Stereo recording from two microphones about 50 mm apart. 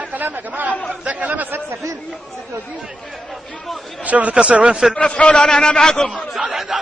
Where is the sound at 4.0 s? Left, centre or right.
Right.